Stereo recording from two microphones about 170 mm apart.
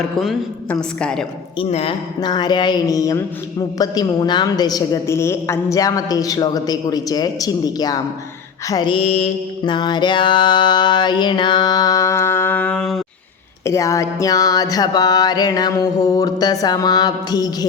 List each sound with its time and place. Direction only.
0.2 s a woman's voice: centre (ahead or behind)
1.5 s mantra: 35° left (ahead or behind); by 13.0 s 5° left (ahead or behind)
13.7 s mantra: 20° left (ahead or behind)